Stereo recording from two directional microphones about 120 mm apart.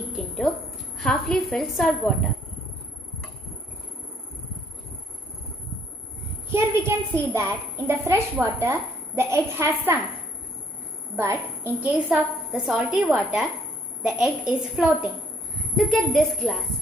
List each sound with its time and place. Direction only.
0.1 s a sound: centre (ahead or behind)
0.9 s a woman's voice: 5° left (ahead or behind)
6.5 s a woman's voice: 20° right (ahead or behind)
11.1 s a woman's voice: 15° right (ahead or behind)
12.6 s a woman's voice: 5° right (ahead or behind)
15.7 s a woman's voice: 5° left (ahead or behind)